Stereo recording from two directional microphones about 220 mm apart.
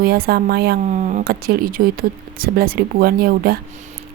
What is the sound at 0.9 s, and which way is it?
Speech, 35° right (ahead or behind).